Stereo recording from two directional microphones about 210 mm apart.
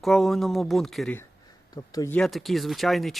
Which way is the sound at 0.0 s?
Centre (ahead or behind).